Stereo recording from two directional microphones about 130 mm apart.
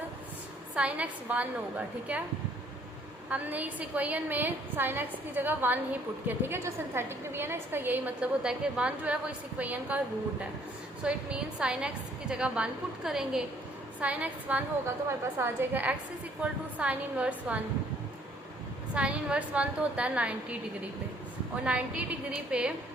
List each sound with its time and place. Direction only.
0.8 s a woman's voice: 10° right (ahead or behind)
3.2 s a woman's voice: 10° right (ahead or behind)
11.0 s a woman's voice: 5° right (ahead or behind)
18.9 s a woman's voice: 10° right (ahead or behind)